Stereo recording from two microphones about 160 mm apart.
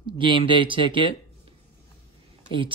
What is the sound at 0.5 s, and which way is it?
Speech, 30° right (ahead or behind).